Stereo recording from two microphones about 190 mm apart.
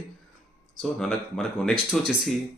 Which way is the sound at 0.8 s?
Centre (ahead or behind).